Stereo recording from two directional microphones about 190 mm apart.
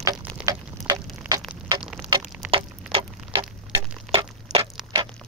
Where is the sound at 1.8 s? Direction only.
5° right (ahead or behind).